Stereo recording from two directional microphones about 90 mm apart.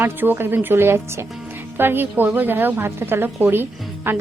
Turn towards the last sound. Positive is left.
turn(degrees=-25)  # may be behind; listen again after turning